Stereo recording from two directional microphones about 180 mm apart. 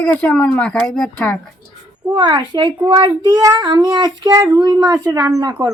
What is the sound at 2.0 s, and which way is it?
Speech, 20° right (ahead or behind).